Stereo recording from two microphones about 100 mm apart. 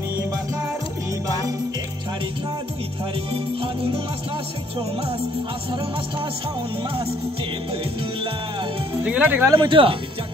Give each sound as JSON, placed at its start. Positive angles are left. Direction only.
{"t": 9.0, "sound": "speech", "side_deg": -15}
{"t": 9.6, "sound": "speech", "side_deg": -60}